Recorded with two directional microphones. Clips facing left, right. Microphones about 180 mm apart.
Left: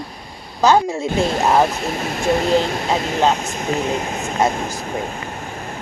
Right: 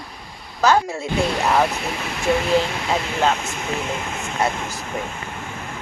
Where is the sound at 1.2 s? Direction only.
40° left (ahead or behind).